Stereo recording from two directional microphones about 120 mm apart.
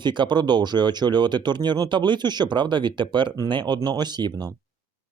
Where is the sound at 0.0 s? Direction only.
40° right (ahead or behind).